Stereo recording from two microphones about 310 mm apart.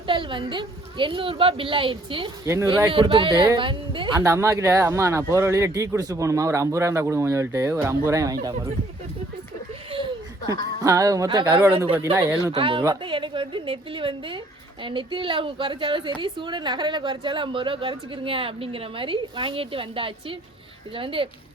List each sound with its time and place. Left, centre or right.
0.1 s a woman's voice: centre
9.9 s a sound: centre
10.8 s a woman's voice: centre